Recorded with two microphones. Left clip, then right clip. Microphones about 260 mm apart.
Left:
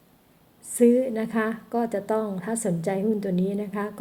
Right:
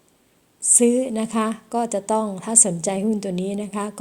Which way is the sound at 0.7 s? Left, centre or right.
Right.